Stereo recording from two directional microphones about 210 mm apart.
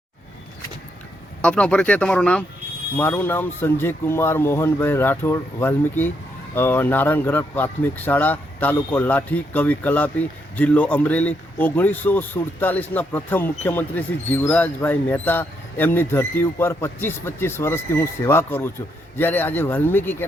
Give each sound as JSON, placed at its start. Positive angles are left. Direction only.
{"t": 1.4, "sound": "speech", "side_deg": 5}